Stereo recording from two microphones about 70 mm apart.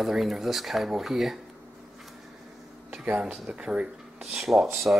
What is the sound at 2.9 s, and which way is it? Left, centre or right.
Speech, centre.